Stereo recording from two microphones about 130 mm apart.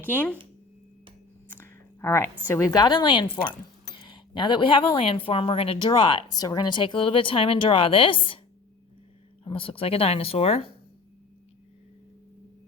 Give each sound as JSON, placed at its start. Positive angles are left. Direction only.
{"t": 0.0, "sound": "speech", "side_deg": 15}
{"t": 1.5, "sound": "a sound", "side_deg": 15}
{"t": 2.5, "sound": "speech", "side_deg": 25}
{"t": 9.4, "sound": "speech", "side_deg": 45}